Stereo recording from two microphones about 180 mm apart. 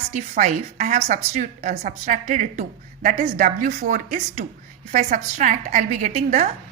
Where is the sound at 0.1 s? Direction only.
45° right (ahead or behind).